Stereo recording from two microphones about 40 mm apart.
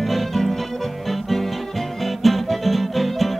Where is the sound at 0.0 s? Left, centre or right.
Centre.